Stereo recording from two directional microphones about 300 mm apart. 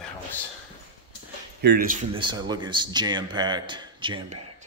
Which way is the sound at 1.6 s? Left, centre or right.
Right.